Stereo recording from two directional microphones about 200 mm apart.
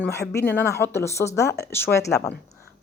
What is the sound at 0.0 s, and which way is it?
Speech, 15° left (ahead or behind).